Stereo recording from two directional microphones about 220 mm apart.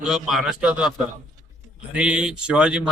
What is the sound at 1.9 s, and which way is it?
Speech, 5° right (ahead or behind).